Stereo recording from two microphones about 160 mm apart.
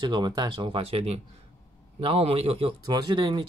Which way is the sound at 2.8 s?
25° right (ahead or behind).